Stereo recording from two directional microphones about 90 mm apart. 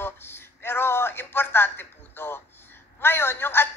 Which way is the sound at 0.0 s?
25° left (ahead or behind).